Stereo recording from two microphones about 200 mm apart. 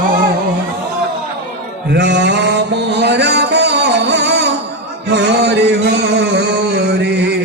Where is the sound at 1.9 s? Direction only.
60° right (ahead or behind).